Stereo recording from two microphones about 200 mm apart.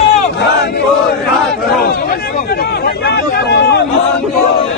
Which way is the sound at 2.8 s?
55° left (ahead or behind).